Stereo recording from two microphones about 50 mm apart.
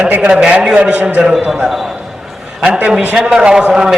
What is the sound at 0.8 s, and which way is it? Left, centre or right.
Speech, right.